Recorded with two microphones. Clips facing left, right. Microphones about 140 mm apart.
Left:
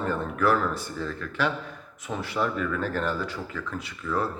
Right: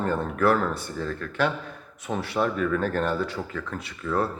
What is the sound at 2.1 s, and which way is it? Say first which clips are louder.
Speech: right 3 dB; 30° right (ahead or behind).